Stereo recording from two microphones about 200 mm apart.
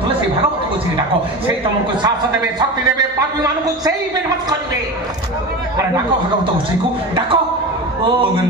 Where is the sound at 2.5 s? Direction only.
20° right (ahead or behind).